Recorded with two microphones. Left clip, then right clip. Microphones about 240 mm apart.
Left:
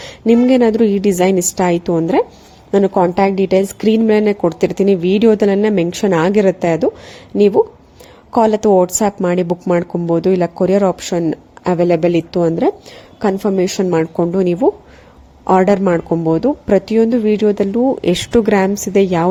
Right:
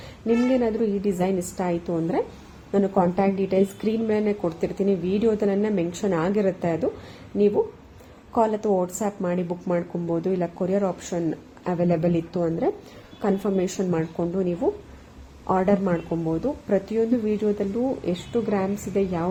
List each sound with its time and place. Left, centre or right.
0.3 s a woman's voice: left